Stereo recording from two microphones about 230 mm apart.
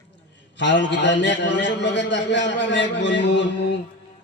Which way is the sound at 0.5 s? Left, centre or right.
Left.